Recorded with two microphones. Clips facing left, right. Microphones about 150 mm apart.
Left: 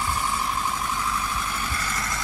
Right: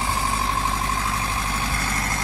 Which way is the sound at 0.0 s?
85° right.